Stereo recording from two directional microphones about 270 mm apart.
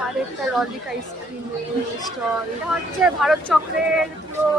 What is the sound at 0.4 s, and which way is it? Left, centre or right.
Speech, centre.